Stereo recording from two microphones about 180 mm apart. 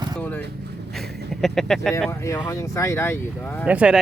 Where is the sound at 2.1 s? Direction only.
15° left (ahead or behind).